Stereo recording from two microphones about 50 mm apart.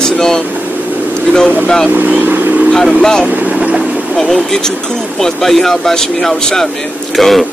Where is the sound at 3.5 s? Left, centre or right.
Centre.